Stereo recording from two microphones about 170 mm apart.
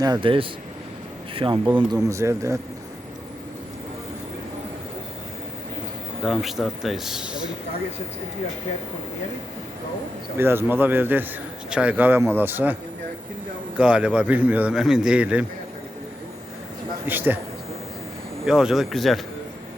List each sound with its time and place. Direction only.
0.0 s a man's voice: 25° right (ahead or behind)
6.2 s speech: centre (ahead or behind)
10.3 s a man's voice: 15° right (ahead or behind)
13.7 s a man's voice: 5° right (ahead or behind)
17.1 s a man's voice: 10° right (ahead or behind)
18.4 s speech: 5° right (ahead or behind)